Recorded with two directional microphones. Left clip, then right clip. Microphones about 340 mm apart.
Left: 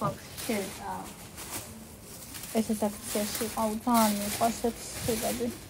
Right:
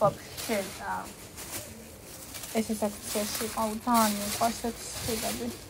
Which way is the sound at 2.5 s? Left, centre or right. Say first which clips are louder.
Even; centre.